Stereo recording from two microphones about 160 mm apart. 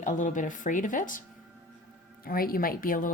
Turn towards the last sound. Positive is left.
turn(degrees=60)  # may be behind; listen again after turning